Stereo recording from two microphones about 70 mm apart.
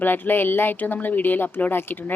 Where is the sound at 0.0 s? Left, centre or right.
Left.